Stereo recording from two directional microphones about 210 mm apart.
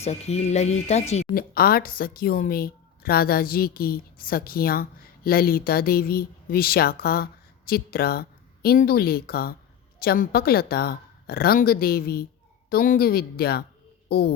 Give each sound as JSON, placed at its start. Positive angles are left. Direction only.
{"t": 0.0, "sound": "speech", "side_deg": 30}
{"t": 1.4, "sound": "a woman's voice", "side_deg": 45}